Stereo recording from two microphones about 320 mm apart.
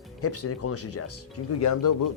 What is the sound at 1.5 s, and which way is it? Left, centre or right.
Speech, left.